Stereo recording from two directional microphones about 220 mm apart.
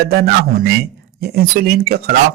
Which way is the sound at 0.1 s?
45° right (ahead or behind).